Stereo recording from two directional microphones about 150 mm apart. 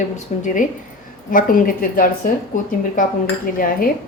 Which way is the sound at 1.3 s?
65° left (ahead or behind).